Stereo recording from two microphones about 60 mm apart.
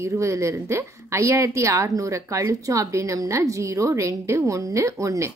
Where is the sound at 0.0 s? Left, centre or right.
Right.